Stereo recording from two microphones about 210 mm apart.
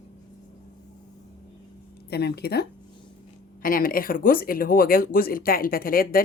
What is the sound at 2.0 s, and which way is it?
Speech, 50° left (ahead or behind).